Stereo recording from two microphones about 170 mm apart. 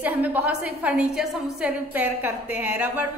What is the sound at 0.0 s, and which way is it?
A woman's voice, 10° right (ahead or behind).